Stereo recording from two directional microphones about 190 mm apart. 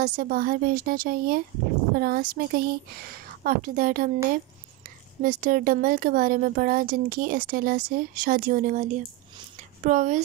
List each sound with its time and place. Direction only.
0.0 s speech: 45° right (ahead or behind)
5.2 s speech: 50° right (ahead or behind)